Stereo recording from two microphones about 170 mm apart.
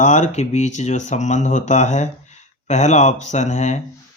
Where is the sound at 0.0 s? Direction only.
45° left (ahead or behind).